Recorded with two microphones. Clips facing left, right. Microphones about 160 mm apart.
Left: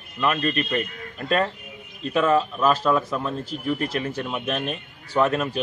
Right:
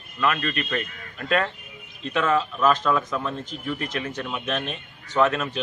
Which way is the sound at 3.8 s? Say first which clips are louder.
Left 3 dB; 35° left (ahead or behind).